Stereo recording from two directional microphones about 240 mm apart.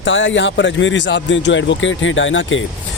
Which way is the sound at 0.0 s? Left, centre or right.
Left.